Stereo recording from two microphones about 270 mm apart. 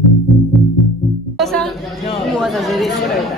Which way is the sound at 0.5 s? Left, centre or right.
Centre.